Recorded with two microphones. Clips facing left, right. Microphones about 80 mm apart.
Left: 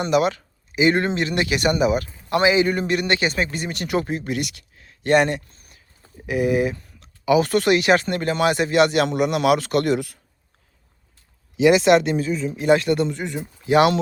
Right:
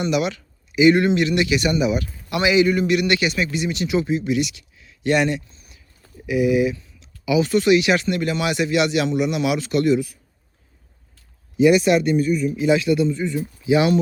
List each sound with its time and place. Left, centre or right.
0.0 s speech: left
11.5 s speech: left
12.6 s speech: left